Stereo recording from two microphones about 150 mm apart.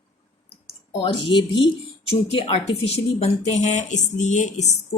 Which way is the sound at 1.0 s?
30° left (ahead or behind).